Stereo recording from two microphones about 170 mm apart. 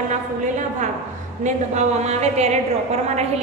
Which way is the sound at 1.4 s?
45° right (ahead or behind).